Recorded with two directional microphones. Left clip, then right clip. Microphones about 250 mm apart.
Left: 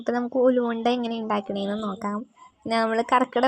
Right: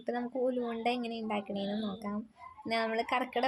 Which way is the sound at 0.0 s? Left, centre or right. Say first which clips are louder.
Left 11 dB; left.